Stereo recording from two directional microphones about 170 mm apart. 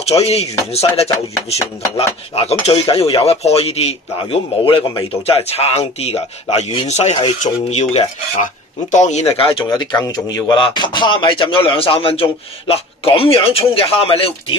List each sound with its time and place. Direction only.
0.0 s speech: 35° left (ahead or behind)
9.4 s speech: 30° left (ahead or behind)